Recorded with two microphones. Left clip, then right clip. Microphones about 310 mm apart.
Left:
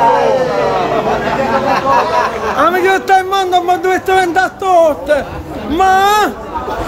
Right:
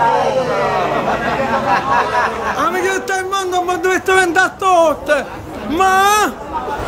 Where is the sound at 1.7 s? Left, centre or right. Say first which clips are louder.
Left 2 dB; left.